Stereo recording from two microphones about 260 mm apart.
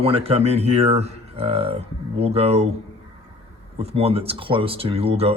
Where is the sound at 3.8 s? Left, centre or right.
Right.